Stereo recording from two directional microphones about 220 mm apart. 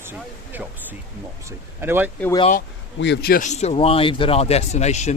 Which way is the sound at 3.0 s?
50° left (ahead or behind).